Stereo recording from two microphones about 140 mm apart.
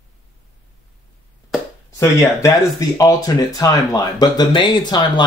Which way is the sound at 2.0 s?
20° left (ahead or behind).